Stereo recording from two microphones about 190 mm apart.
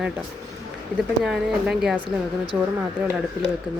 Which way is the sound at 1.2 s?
Centre (ahead or behind).